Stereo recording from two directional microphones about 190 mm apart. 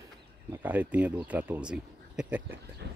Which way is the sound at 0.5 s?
10° right (ahead or behind).